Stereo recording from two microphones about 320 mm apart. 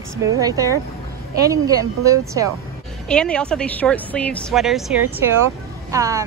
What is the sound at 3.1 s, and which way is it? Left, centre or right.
A woman's voice, centre.